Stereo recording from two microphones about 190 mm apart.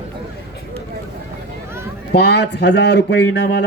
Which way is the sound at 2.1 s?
60° left (ahead or behind).